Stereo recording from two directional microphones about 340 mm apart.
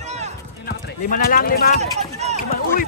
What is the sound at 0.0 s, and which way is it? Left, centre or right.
Clip-clop, centre.